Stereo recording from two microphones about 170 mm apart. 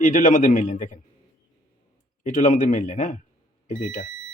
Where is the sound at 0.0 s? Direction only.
50° left (ahead or behind).